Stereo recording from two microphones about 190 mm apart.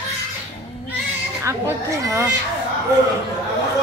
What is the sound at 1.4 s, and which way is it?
Speech, 15° right (ahead or behind).